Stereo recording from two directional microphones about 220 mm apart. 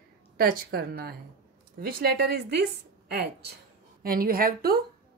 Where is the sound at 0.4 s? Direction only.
45° right (ahead or behind).